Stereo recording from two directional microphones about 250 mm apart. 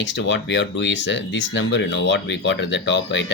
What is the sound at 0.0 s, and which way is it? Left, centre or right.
Speech, left.